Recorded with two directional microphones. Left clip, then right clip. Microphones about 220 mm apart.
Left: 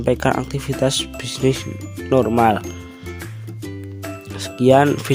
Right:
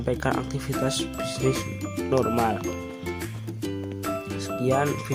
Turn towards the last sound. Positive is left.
turn(degrees=35)  # may be behind; listen again after turning